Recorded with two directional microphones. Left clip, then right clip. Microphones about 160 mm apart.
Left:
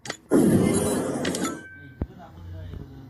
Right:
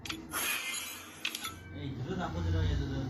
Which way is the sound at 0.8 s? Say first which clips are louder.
Left 14 dB; 15° left (ahead or behind).